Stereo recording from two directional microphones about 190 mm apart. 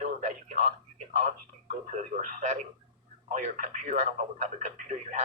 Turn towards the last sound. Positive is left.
turn(degrees=-40)  # may be behind; listen again after turning